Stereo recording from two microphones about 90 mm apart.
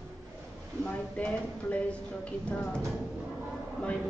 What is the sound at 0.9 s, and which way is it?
Speech, 15° left (ahead or behind).